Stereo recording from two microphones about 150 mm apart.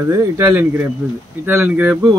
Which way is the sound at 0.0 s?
20° right (ahead or behind).